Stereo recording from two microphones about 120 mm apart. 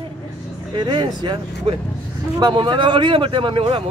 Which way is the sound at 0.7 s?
40° right (ahead or behind).